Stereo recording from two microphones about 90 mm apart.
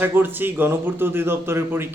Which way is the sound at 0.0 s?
20° right (ahead or behind).